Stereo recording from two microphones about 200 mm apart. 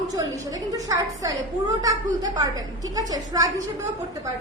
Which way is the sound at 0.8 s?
15° right (ahead or behind).